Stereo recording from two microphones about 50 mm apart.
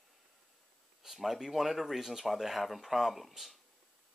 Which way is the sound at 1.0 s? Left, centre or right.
Centre.